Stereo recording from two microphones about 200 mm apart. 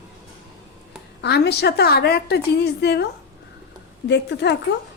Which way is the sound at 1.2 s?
55° left (ahead or behind).